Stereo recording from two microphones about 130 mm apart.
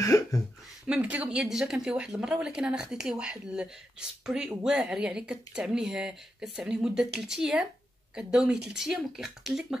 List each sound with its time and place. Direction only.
0.0 s speech: 25° left (ahead or behind)
0.8 s speech: 10° right (ahead or behind)